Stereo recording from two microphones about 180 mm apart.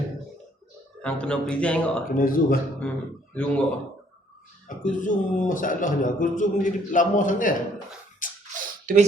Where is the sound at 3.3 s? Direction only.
5° left (ahead or behind).